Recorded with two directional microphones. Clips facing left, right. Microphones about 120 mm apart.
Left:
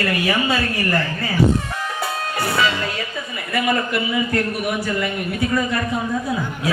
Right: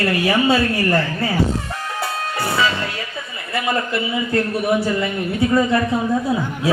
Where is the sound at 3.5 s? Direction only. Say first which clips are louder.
Left 1 dB; 25° right (ahead or behind).